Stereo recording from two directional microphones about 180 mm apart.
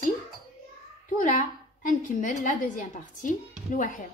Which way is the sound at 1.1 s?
45° left (ahead or behind).